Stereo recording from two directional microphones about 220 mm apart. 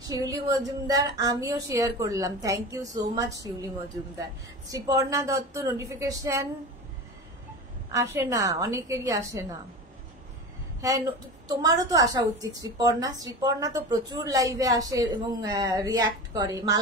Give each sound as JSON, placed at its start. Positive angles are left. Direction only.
{"t": 0.2, "sound": "a woman's voice", "side_deg": -15}
{"t": 4.8, "sound": "a woman's voice", "side_deg": -15}
{"t": 7.9, "sound": "a woman's voice", "side_deg": -10}
{"t": 11.4, "sound": "a woman's voice", "side_deg": -15}